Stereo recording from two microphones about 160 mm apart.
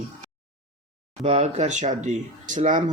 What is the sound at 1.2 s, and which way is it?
Speech, 40° right (ahead or behind).